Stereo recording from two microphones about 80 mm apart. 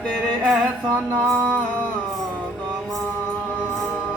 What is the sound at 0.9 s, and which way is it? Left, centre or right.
Mantra, centre.